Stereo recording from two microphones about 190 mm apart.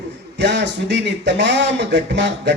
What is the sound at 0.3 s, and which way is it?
Speech, 65° right (ahead or behind).